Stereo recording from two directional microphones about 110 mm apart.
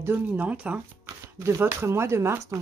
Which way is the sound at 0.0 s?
20° right (ahead or behind).